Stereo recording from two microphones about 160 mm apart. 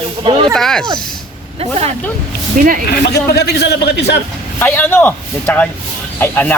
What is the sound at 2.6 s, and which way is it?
Speech, 55° right (ahead or behind).